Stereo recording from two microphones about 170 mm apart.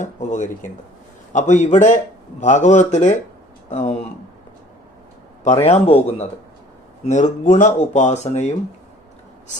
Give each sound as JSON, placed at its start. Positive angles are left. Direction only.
{"t": 0.0, "sound": "speech", "side_deg": 45}
{"t": 5.6, "sound": "a man's voice", "side_deg": 40}